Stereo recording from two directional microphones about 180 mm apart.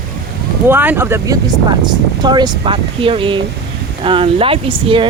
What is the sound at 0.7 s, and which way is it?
Speech, 10° right (ahead or behind).